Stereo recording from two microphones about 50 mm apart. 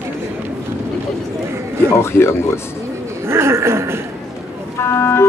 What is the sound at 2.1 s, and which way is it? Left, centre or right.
Speech, left.